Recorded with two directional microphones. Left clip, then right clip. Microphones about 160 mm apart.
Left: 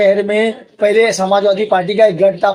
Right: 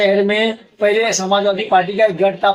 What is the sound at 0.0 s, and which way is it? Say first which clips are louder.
Speech: left 2 dB; 65° left (ahead or behind).